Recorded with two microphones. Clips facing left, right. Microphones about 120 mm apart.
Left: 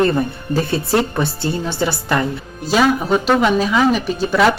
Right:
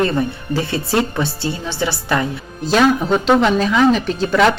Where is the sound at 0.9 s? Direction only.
20° left (ahead or behind).